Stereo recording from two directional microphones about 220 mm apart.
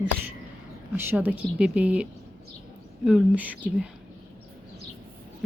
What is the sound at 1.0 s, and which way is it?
A woman's voice, 10° right (ahead or behind).